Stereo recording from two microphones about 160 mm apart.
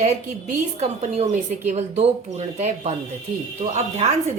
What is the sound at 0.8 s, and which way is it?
A woman's voice, 40° right (ahead or behind).